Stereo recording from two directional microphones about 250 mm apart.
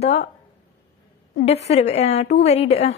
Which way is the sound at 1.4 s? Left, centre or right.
Left.